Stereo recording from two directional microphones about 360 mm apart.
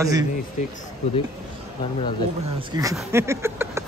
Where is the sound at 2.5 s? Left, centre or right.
Centre.